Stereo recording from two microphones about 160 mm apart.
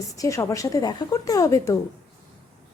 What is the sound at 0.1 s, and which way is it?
A woman's voice, 20° left (ahead or behind).